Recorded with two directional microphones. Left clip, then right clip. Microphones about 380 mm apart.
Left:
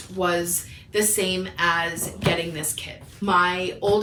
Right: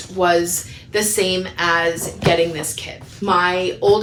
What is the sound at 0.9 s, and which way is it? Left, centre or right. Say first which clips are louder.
A woman's voice: right 5 dB; centre.